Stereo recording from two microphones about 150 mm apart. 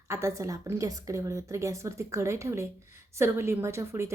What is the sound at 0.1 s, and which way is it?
Speech, 20° right (ahead or behind).